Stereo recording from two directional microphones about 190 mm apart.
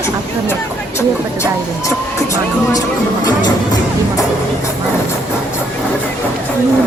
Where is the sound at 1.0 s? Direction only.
15° left (ahead or behind).